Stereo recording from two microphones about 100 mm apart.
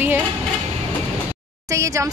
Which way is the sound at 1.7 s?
30° right (ahead or behind).